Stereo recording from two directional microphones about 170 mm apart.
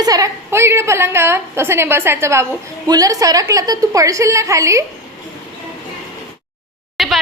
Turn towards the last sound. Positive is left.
turn(degrees=0)  # may be behind; listen again after turning